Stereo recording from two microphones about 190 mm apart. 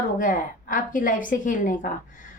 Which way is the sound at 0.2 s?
45° left (ahead or behind).